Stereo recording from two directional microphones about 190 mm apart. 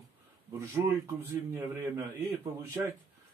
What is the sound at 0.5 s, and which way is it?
A man's voice, 15° right (ahead or behind).